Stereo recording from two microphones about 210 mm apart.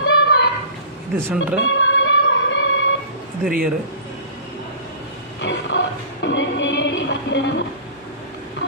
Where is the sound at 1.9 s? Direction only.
65° left (ahead or behind).